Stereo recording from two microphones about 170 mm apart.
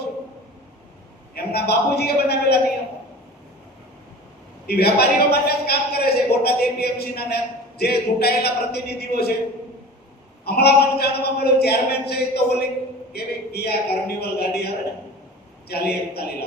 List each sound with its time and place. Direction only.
1.4 s a man's voice: 70° left (ahead or behind)
4.6 s a man's voice: 70° left (ahead or behind)
10.4 s a man's voice: 70° left (ahead or behind)
15.7 s a man's voice: 70° left (ahead or behind)